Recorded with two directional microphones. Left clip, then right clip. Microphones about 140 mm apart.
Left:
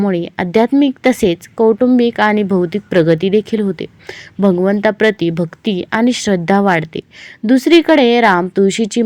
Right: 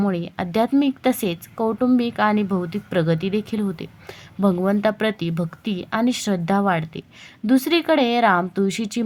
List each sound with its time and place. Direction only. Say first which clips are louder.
0.0 s speech: left 8 dB; 25° left (ahead or behind)